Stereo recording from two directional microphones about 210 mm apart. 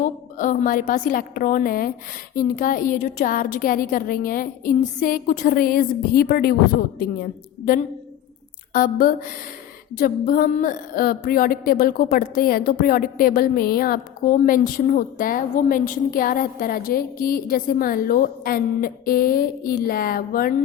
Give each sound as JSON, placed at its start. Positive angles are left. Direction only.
{"t": 0.0, "sound": "a woman's voice", "side_deg": 40}
{"t": 8.7, "sound": "a woman's voice", "side_deg": 40}